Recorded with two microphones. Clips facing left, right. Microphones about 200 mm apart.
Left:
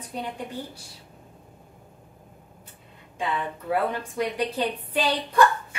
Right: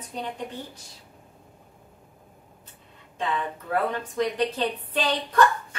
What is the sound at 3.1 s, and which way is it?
A woman's voice, 10° left (ahead or behind).